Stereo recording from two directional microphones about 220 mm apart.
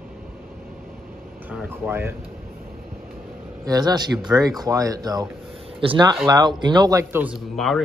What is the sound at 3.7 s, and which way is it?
Speech, 15° right (ahead or behind).